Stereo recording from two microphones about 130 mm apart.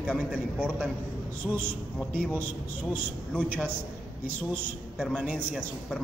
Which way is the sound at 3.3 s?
10° left (ahead or behind).